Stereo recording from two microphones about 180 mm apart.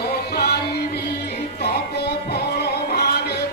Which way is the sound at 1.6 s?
65° left (ahead or behind).